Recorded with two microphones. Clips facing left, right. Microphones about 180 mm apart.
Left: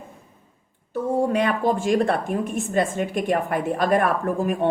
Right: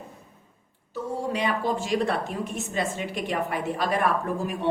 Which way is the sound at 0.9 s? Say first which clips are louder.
Left 7 dB; 55° left (ahead or behind).